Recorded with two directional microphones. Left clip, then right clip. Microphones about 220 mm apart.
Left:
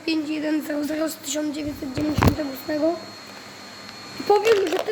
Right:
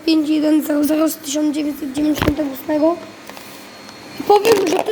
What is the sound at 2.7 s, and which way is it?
Speech, 20° right (ahead or behind).